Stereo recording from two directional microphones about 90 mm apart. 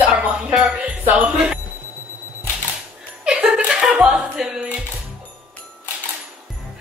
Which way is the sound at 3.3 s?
10° right (ahead or behind).